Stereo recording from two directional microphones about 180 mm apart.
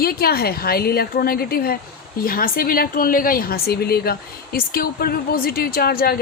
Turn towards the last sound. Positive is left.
turn(degrees=60)  # may be behind; listen again after turning